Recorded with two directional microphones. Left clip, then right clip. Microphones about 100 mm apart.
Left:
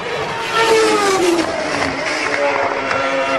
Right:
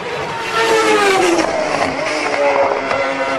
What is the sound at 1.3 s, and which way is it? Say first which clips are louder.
Music: right 2 dB; 45° right (ahead or behind).